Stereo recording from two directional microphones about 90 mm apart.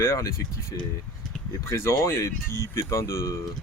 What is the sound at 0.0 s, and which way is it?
Speech, 30° left (ahead or behind).